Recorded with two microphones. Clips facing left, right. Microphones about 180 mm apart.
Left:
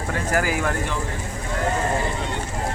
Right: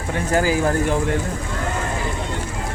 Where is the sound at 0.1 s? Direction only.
25° right (ahead or behind).